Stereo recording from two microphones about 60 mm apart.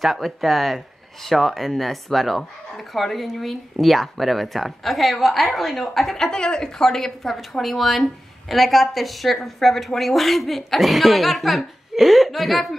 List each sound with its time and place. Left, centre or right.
0.0 s a woman's voice: centre